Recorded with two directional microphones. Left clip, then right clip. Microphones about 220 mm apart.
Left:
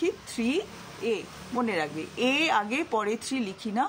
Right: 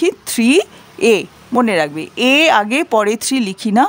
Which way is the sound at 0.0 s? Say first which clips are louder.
Right 13 dB; 50° right (ahead or behind).